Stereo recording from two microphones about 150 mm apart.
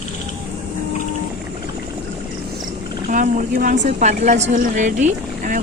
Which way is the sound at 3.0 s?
65° right (ahead or behind).